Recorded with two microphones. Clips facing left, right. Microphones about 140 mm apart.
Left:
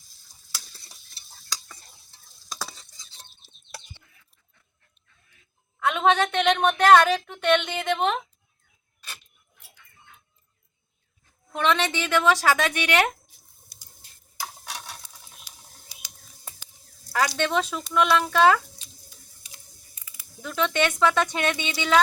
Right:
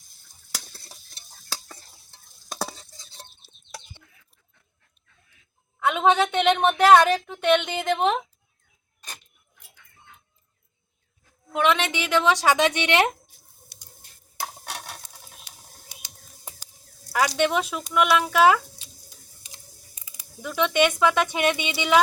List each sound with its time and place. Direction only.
0.5 s stir: 55° right (ahead or behind)
2.6 s stir: 35° right (ahead or behind)
5.9 s a woman's voice: 10° right (ahead or behind)
11.5 s speech: 10° right (ahead or behind)
13.7 s a sound: 70° right (ahead or behind)
14.3 s a sound: 50° right (ahead or behind)
17.1 s speech: 10° right (ahead or behind)
20.0 s speech: 20° right (ahead or behind)